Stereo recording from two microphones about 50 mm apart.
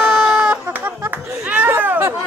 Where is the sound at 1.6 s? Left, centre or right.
Right.